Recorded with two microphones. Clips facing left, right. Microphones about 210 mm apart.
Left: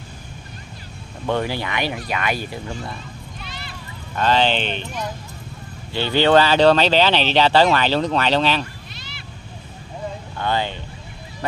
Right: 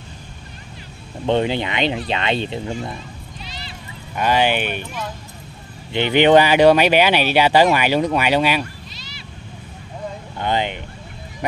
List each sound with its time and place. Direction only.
1.2 s speech: 20° right (ahead or behind)
3.3 s a sound: 55° left (ahead or behind)
4.1 s speech: 10° right (ahead or behind)
8.9 s vehicle: 55° left (ahead or behind)
10.4 s speech: 20° right (ahead or behind)